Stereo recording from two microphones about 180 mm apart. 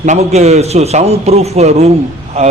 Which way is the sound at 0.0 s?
40° right (ahead or behind).